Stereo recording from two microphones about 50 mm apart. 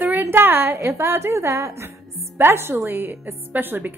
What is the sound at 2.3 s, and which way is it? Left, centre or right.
Speech, right.